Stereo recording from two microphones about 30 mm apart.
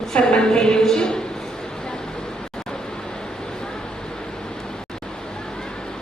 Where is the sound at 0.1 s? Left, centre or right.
Left.